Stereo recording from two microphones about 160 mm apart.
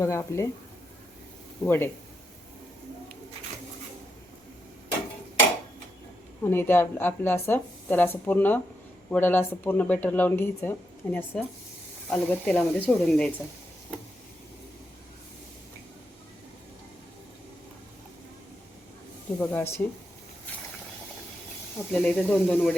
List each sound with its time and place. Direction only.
0.0 s speech: 15° left (ahead or behind)
1.6 s speech: 10° left (ahead or behind)
6.4 s speech: 15° left (ahead or behind)
19.4 s speech: 10° left (ahead or behind)
21.9 s speech: 5° left (ahead or behind)